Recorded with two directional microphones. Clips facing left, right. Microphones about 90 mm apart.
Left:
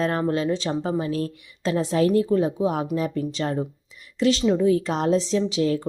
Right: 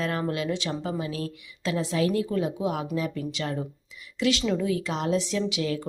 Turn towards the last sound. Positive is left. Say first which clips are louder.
# left 5 dB
turn(degrees=35)  # may be behind; listen again after turning